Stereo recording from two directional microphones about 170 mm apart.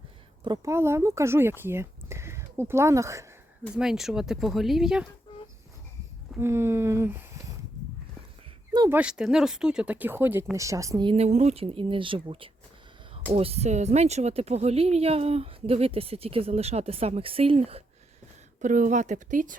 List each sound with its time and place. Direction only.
0.4 s speech: 20° right (ahead or behind)
3.8 s speech: centre (ahead or behind)
6.4 s speech: 15° right (ahead or behind)
8.9 s speech: 5° right (ahead or behind); by 17.8 s 35° right (ahead or behind)
18.6 s speech: 45° right (ahead or behind)